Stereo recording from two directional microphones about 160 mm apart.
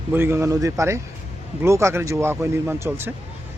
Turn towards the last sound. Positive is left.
turn(degrees=-15)  # may be behind; listen again after turning